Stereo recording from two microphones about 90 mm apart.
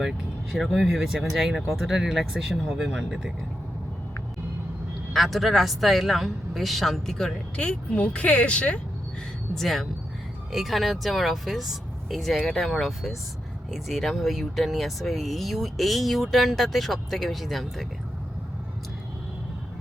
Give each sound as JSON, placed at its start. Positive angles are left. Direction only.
{"t": 0.0, "sound": "speech", "side_deg": 0}
{"t": 5.1, "sound": "speech", "side_deg": 0}
{"t": 9.6, "sound": "speech", "side_deg": 5}